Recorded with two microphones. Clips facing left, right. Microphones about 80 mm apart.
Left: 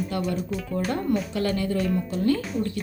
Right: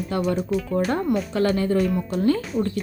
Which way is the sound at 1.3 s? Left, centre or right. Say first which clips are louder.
Right 5 dB; right.